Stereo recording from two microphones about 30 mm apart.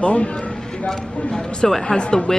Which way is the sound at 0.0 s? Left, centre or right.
Left.